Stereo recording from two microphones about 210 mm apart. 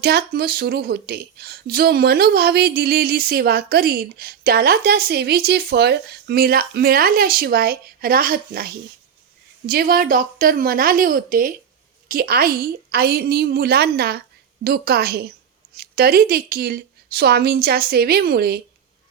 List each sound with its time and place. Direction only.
0.0 s speech: 50° right (ahead or behind)